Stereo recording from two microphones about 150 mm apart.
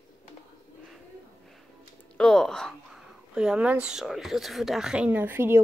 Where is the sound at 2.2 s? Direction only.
5° left (ahead or behind); by 5.6 s 15° right (ahead or behind).